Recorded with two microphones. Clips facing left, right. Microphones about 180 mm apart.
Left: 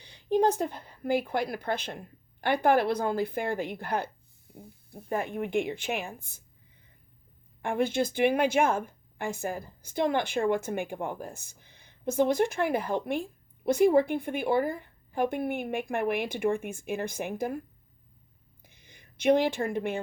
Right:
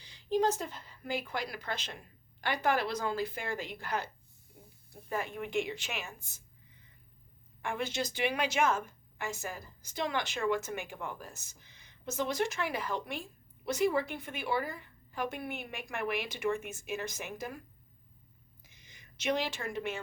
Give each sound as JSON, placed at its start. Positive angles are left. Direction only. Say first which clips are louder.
{"t": 0.0, "sound": "a woman's voice", "louder": "left 5 dB", "side_deg": 60}
{"t": 7.6, "sound": "a woman's voice", "louder": "left 8 dB", "side_deg": 55}
{"t": 18.6, "sound": "a sound", "louder": "left 4 dB", "side_deg": 55}